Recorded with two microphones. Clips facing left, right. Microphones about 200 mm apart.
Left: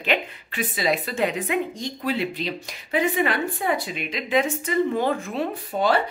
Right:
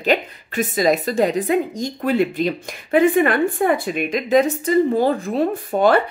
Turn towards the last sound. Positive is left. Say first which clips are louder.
# right 6 dB
turn(degrees=-50)  # may be behind; listen again after turning